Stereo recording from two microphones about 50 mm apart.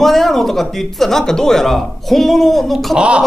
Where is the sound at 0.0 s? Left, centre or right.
Centre.